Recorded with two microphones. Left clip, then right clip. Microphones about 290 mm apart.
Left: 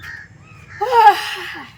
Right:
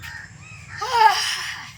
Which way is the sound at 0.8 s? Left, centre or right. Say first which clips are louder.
Left 6 dB; left.